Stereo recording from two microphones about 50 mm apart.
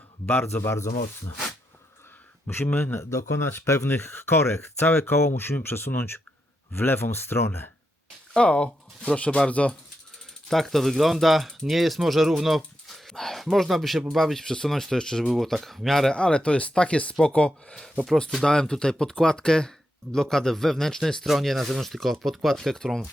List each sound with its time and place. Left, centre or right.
0.4 s speech: left
2.7 s speech: left
3.0 s speech: left
3.8 s speech: left
5.9 s speech: left
8.3 s speech: centre
10.5 s speech: centre
15.2 s speech: centre
16.1 s speech: left
18.3 s speech: centre
21.2 s speech: centre